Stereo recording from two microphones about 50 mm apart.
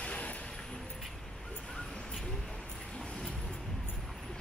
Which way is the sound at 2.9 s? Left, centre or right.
Left.